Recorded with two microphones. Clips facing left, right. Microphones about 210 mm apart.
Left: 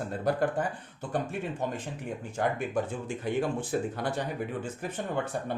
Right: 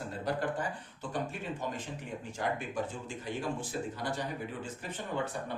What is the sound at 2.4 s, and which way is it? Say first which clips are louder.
Speech: left 5 dB; 55° left (ahead or behind).